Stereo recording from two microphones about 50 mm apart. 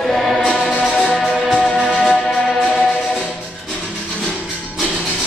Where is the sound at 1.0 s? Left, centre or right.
Centre.